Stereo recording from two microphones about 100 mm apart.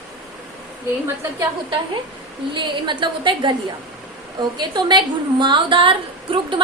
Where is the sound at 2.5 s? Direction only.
50° right (ahead or behind).